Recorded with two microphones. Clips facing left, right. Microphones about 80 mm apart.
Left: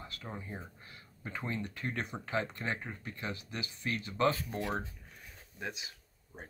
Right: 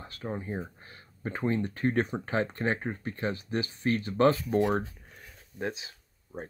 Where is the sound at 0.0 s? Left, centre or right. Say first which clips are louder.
Right 8 dB; right.